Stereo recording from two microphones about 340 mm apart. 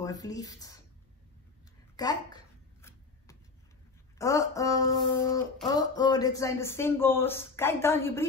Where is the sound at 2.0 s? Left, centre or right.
Centre.